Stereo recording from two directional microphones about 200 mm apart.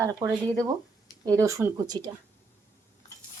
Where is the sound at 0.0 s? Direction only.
15° right (ahead or behind).